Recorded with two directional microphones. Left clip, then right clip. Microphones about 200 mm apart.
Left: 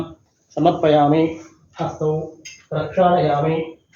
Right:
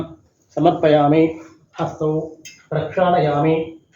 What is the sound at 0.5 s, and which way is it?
Speech, centre (ahead or behind).